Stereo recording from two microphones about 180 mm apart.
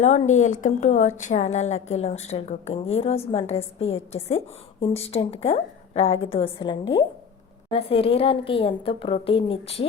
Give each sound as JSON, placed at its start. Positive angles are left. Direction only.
{"t": 0.0, "sound": "a woman's voice", "side_deg": 40}